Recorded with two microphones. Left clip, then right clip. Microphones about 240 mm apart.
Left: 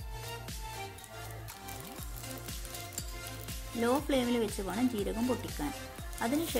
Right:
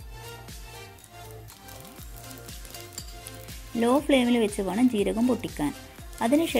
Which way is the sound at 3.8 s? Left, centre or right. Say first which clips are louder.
Right 8 dB; centre.